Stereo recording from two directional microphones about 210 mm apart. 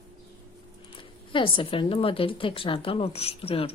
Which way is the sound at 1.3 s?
25° left (ahead or behind).